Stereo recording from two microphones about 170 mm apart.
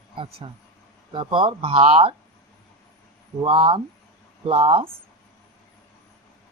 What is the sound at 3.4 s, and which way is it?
Speech, 30° right (ahead or behind).